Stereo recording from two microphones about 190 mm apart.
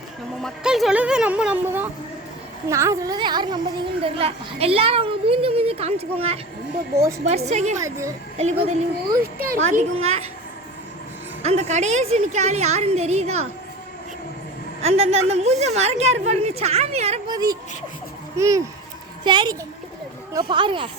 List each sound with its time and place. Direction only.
0.4 s a child's voice: centre (ahead or behind); by 7.8 s 35° right (ahead or behind)
7.8 s a child's voice: 15° right (ahead or behind)
8.4 s a woman's voice: 35° right (ahead or behind)
11.4 s a woman's voice: 35° right (ahead or behind)
14.8 s a woman's voice: 35° right (ahead or behind)
17.2 s a child's voice: 20° right (ahead or behind)